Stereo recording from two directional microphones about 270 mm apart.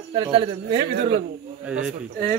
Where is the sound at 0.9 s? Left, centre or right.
Right.